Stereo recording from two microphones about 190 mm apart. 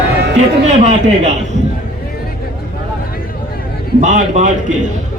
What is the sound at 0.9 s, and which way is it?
Speech, 35° right (ahead or behind).